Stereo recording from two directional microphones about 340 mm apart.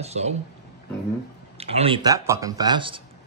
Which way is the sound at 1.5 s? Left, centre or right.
Centre.